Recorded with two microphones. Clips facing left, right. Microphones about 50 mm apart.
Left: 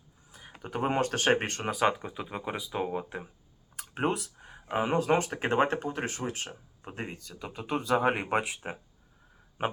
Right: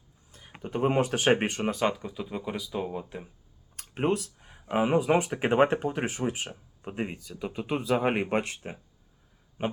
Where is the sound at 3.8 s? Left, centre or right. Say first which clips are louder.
Right 2 dB; centre.